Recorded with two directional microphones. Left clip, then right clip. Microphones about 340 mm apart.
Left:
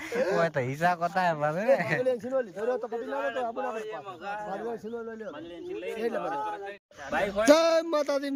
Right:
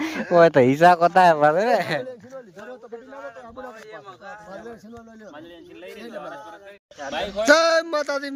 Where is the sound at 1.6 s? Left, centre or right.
Centre.